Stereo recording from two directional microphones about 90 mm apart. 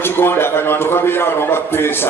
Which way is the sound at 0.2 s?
25° left (ahead or behind).